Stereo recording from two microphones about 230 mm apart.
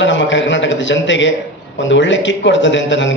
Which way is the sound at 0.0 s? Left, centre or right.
Left.